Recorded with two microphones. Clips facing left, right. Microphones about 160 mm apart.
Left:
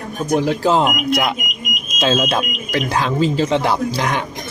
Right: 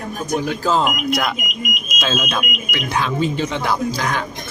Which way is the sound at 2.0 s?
30° left (ahead or behind).